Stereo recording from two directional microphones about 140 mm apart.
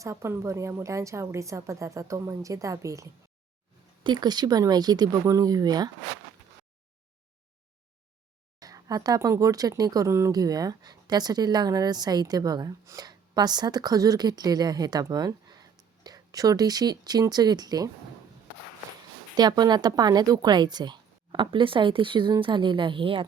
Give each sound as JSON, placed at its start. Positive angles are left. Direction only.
{"t": 0.0, "sound": "speech", "side_deg": -20}
{"t": 8.5, "sound": "speech", "side_deg": -25}
{"t": 19.4, "sound": "a woman's voice", "side_deg": -30}